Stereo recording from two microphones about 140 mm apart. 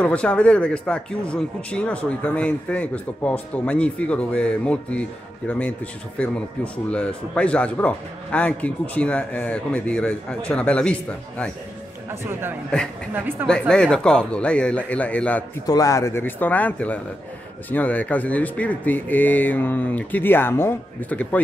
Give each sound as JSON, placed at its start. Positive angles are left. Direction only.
{"t": 0.0, "sound": "a man's voice", "side_deg": 10}
{"t": 12.1, "sound": "speech", "side_deg": -15}
{"t": 13.5, "sound": "a man's voice", "side_deg": 5}
{"t": 15.6, "sound": "a man's voice", "side_deg": 25}